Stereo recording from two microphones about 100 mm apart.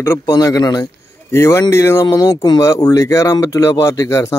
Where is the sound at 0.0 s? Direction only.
30° left (ahead or behind).